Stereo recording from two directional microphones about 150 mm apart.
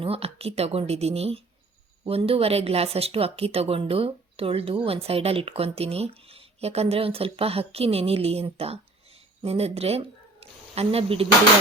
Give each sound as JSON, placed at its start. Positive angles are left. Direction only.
{"t": 0.0, "sound": "a woman's voice", "side_deg": -40}
{"t": 10.4, "sound": "snake", "side_deg": -40}
{"t": 10.8, "sound": "speech", "side_deg": -40}